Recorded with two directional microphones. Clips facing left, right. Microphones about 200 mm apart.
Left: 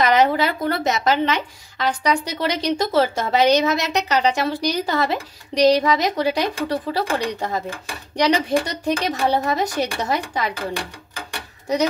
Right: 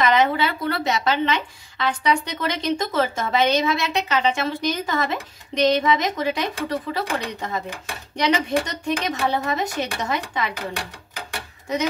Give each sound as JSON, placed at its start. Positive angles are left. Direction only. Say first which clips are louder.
{"t": 0.0, "sound": "a woman's voice", "louder": "left 2 dB", "side_deg": 40}